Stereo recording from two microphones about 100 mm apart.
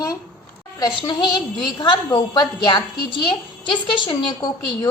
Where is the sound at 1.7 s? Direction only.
45° left (ahead or behind).